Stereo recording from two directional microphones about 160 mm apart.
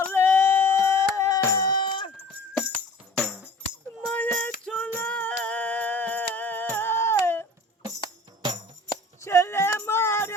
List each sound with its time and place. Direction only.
0.0 s music: 15° left (ahead or behind); by 2.1 s 30° left (ahead or behind)
3.2 s music: centre (ahead or behind)
4.1 s music: 10° left (ahead or behind)
8.9 s a sound: 15° left (ahead or behind)